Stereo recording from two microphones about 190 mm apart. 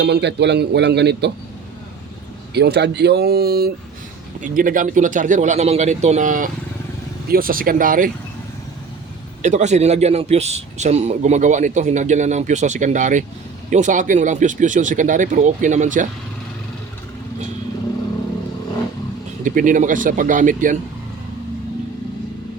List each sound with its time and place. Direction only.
0.0 s a man's voice: 60° right (ahead or behind)
2.5 s a man's voice: 60° right (ahead or behind)
9.4 s a man's voice: 40° right (ahead or behind)
19.5 s speech: 45° right (ahead or behind)